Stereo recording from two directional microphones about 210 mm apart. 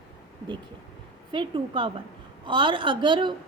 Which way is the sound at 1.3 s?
25° right (ahead or behind).